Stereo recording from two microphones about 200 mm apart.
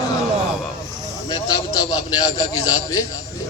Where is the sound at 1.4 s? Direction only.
20° left (ahead or behind).